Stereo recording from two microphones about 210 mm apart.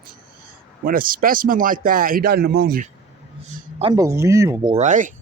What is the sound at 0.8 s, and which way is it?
Speech, 45° right (ahead or behind).